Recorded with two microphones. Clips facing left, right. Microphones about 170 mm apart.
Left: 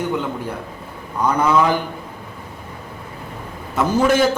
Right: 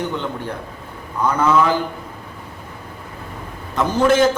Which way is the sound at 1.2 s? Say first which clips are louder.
Even; 15° left (ahead or behind).